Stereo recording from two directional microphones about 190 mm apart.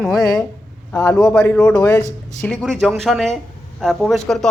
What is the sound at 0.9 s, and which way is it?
Speech, 5° left (ahead or behind).